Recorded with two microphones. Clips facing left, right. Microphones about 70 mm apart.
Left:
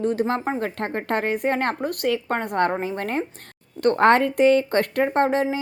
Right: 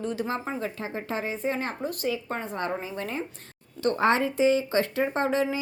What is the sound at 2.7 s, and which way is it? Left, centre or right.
A woman's voice, left.